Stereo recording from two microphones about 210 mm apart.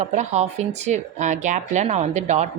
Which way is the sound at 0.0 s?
35° right (ahead or behind).